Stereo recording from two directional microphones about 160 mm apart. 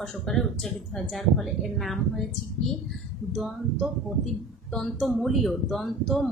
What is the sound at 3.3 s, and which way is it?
A woman's voice, 5° right (ahead or behind).